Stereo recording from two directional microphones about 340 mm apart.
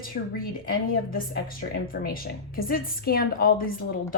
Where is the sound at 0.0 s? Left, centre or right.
Left.